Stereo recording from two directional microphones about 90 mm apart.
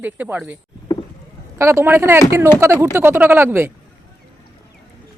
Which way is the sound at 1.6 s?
30° right (ahead or behind).